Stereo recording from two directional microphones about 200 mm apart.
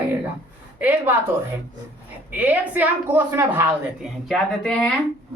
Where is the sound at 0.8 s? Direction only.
10° right (ahead or behind).